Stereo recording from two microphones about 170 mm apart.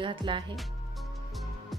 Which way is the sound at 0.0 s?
30° right (ahead or behind).